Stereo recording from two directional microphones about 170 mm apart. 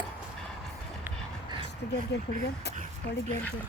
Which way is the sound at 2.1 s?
90° left.